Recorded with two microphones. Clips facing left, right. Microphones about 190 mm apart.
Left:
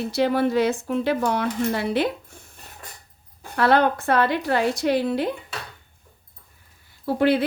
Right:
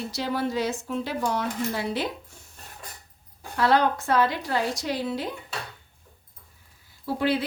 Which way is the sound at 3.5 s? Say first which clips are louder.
Left 3 dB; 55° left (ahead or behind).